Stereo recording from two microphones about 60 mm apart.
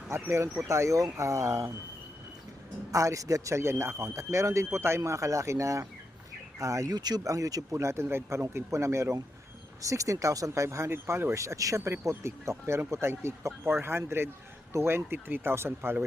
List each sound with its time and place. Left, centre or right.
0.1 s a man's voice: right
2.9 s a man's voice: right
8.0 s speech: right
8.4 s a man's voice: right
10.8 s speech: right
11.3 s a man's voice: right
12.0 s speech: right